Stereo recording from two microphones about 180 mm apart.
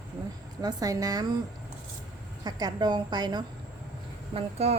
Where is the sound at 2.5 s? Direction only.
20° right (ahead or behind).